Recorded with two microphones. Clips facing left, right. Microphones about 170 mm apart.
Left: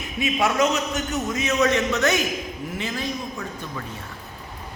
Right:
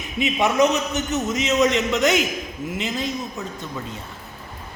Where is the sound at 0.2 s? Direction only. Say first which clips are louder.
Right 3 dB; 20° right (ahead or behind).